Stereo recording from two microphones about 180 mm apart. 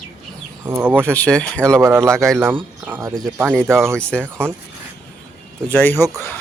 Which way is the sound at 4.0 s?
5° left (ahead or behind).